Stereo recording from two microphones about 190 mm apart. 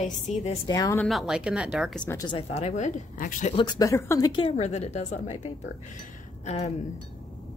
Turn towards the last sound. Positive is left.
turn(degrees=35)  # may be behind; listen again after turning